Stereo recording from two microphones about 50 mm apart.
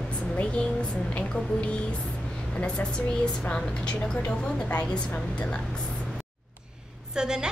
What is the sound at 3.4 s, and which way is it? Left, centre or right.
Speech, centre.